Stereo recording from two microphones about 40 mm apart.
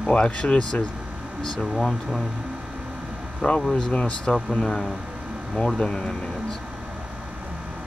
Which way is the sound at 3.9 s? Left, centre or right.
Left.